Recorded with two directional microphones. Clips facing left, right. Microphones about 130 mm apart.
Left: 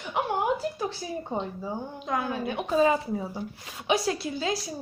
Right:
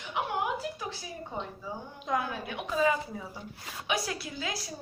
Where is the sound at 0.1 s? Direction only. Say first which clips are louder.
Left 5 dB; 35° left (ahead or behind).